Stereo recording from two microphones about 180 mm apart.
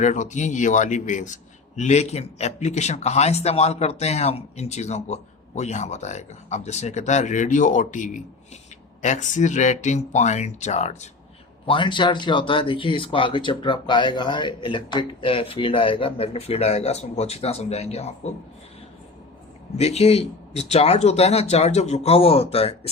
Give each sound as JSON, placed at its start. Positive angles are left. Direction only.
{"t": 0.0, "sound": "a man's voice", "side_deg": 40}
{"t": 11.6, "sound": "speech", "side_deg": 25}
{"t": 19.7, "sound": "a man's voice", "side_deg": 35}